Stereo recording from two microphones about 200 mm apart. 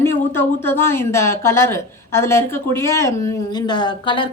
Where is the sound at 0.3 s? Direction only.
10° left (ahead or behind).